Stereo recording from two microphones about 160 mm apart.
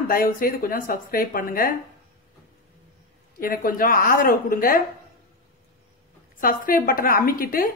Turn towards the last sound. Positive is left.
turn(degrees=65)  # may be behind; listen again after turning